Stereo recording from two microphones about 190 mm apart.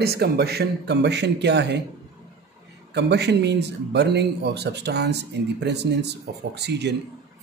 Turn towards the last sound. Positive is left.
turn(degrees=-60)  # may be behind; listen again after turning